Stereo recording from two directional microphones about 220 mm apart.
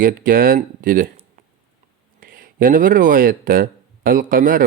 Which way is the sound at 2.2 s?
40° right (ahead or behind).